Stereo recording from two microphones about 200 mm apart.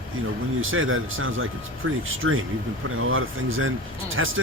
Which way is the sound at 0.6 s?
85° right.